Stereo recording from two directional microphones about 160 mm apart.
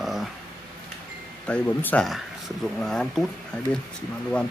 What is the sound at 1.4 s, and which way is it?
A man's voice, 10° left (ahead or behind).